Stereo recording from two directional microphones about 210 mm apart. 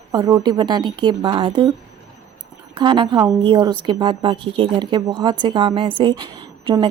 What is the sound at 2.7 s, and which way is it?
Speech, 25° right (ahead or behind).